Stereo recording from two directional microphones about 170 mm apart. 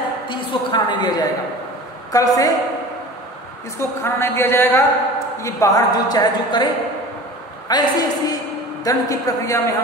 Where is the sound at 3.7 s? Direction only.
15° left (ahead or behind).